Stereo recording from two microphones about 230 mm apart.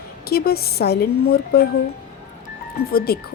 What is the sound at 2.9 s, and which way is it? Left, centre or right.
Speech, left.